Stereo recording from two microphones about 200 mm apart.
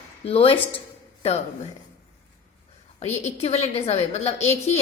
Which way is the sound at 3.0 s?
35° left (ahead or behind).